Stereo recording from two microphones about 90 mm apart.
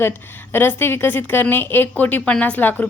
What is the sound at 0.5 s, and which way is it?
A woman's voice, 25° left (ahead or behind).